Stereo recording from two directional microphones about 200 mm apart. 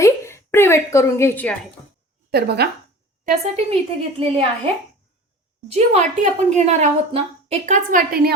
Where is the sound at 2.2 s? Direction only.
55° right (ahead or behind).